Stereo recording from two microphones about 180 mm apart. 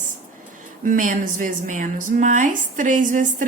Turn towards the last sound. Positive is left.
turn(degrees=-45)  # may be behind; listen again after turning